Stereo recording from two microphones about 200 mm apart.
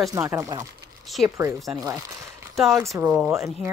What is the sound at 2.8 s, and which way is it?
Speech, 10° right (ahead or behind).